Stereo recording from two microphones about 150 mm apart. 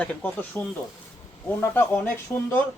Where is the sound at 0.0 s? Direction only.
10° left (ahead or behind).